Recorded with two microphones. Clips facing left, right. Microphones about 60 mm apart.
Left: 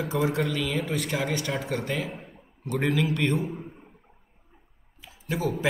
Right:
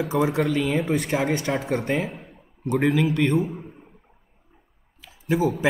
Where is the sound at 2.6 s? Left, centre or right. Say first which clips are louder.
Right 5 dB; centre.